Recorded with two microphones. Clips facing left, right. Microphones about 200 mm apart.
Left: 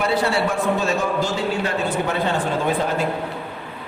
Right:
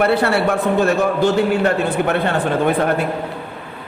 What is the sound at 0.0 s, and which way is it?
A man's voice, 60° right (ahead or behind).